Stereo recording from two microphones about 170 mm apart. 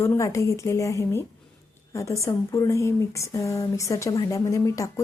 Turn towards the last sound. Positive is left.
turn(degrees=20)  # may be behind; listen again after turning